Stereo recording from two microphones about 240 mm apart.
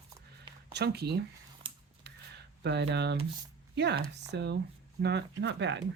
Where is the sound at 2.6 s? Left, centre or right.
Right.